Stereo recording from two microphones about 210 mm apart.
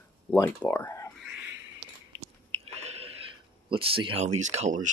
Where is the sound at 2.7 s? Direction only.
30° right (ahead or behind).